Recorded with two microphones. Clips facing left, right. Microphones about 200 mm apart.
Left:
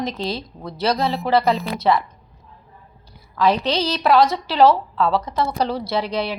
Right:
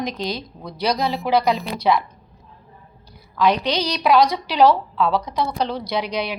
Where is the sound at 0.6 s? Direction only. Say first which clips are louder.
Left 1 dB; centre (ahead or behind).